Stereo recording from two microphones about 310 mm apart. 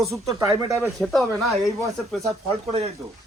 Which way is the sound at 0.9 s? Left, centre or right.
Centre.